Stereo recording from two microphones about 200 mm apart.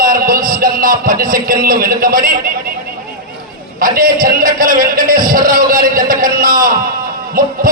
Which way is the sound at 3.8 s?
45° right (ahead or behind).